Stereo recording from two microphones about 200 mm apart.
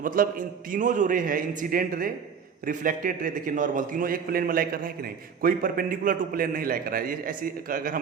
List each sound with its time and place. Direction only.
0.0 s a man's voice: 45° right (ahead or behind)